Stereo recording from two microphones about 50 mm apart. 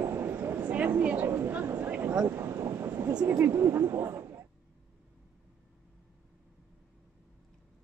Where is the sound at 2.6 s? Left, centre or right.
Right.